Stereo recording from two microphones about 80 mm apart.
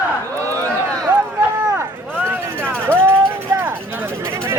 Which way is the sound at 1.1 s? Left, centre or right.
Right.